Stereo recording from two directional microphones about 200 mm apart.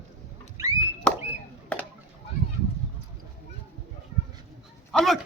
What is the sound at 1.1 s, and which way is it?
Chop, 5° left (ahead or behind).